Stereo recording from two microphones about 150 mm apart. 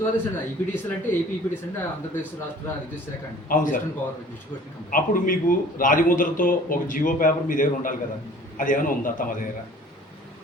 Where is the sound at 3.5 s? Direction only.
65° left (ahead or behind).